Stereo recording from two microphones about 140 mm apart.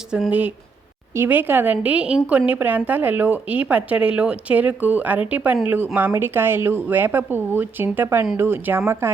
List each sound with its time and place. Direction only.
0.1 s a woman's voice: 10° right (ahead or behind)